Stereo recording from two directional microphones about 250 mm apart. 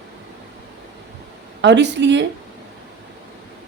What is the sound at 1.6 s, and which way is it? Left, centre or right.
Speech, right.